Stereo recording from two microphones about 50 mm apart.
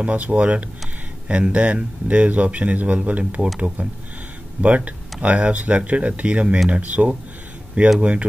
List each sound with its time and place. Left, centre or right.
0.0 s speech: right
4.6 s speech: right